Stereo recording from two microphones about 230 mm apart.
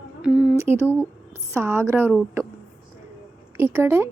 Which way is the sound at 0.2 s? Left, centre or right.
Centre.